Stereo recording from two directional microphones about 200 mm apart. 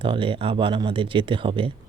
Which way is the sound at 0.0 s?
25° right (ahead or behind).